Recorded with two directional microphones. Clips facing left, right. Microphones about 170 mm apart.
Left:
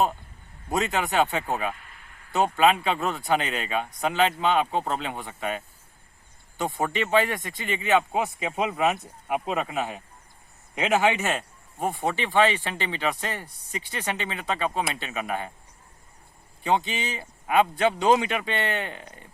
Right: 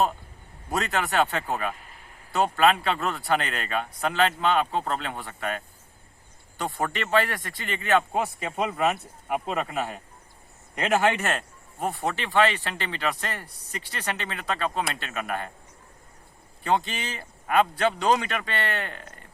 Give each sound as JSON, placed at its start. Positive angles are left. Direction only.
{"t": 0.9, "sound": "speech", "side_deg": 15}
{"t": 1.5, "sound": "speech", "side_deg": 5}
{"t": 8.1, "sound": "speech", "side_deg": 0}
{"t": 11.9, "sound": "speech", "side_deg": 15}
{"t": 16.8, "sound": "speech", "side_deg": 0}
{"t": 17.1, "sound": "speech", "side_deg": 15}